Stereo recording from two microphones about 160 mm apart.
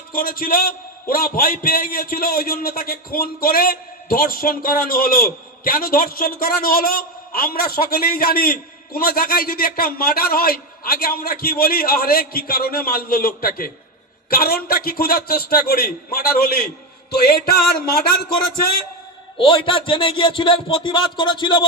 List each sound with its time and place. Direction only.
0.1 s a man's voice: 65° left (ahead or behind)
19.4 s speech: 35° left (ahead or behind)